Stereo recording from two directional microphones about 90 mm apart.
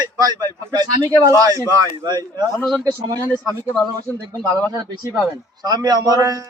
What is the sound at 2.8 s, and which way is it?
Speech, 40° right (ahead or behind).